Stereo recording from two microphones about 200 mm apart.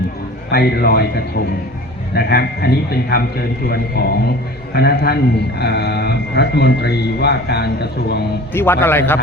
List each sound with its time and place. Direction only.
0.5 s a man's voice: 50° left (ahead or behind)
8.5 s a man's voice: 10° left (ahead or behind)